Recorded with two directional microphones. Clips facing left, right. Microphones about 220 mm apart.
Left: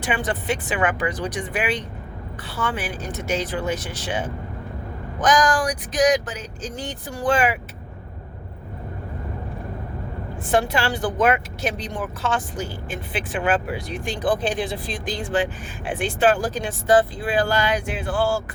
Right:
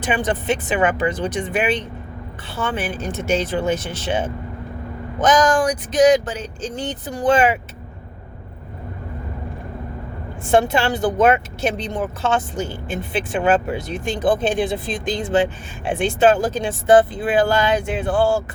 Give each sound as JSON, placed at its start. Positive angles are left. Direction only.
{"t": 0.0, "sound": "speech", "side_deg": -20}
{"t": 10.4, "sound": "speech", "side_deg": -25}